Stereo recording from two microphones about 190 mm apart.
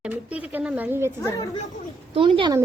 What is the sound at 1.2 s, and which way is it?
Speech, 15° left (ahead or behind).